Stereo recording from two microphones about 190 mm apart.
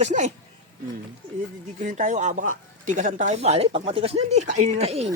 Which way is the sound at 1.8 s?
45° right (ahead or behind).